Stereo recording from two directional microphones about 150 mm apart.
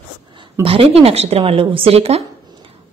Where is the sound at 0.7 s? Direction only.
40° right (ahead or behind).